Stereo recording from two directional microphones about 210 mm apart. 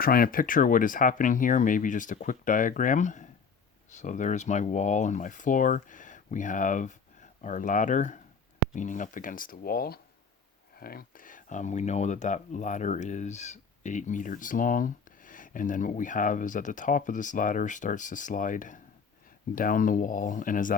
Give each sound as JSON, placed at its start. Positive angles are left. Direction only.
{"t": 0.0, "sound": "speech", "side_deg": 45}